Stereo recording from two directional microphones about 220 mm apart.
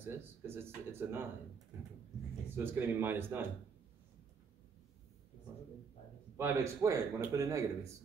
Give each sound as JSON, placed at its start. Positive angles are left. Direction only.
{"t": 0.0, "sound": "speech", "side_deg": -10}
{"t": 2.5, "sound": "a man's voice", "side_deg": -10}
{"t": 6.3, "sound": "a man's voice", "side_deg": -10}